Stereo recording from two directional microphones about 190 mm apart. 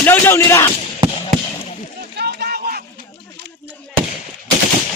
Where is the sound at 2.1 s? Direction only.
60° right (ahead or behind).